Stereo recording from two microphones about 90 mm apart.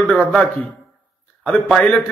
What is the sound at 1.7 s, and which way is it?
Speech, 5° left (ahead or behind).